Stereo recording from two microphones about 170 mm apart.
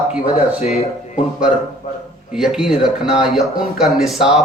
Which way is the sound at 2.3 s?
5° right (ahead or behind).